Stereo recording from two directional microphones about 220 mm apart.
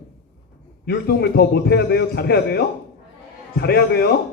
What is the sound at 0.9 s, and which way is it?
A man's voice, 45° left (ahead or behind).